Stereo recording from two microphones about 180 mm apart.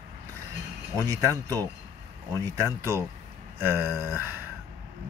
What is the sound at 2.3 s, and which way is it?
Speech, 20° right (ahead or behind).